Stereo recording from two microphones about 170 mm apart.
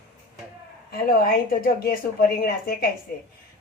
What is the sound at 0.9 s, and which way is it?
A woman's voice, 60° left (ahead or behind).